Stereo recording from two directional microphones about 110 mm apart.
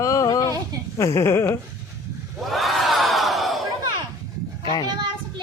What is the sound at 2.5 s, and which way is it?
Crowd, centre (ahead or behind).